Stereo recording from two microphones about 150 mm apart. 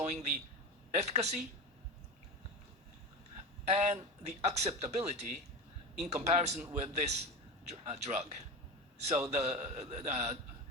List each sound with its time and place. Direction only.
0.0 s a man's voice: 50° right (ahead or behind)
3.7 s a man's voice: 50° right (ahead or behind)